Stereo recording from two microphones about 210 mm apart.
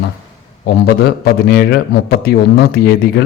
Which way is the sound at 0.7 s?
50° left (ahead or behind).